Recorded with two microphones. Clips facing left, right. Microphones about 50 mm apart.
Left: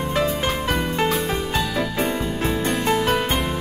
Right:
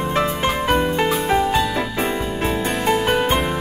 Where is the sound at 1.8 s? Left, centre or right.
Right.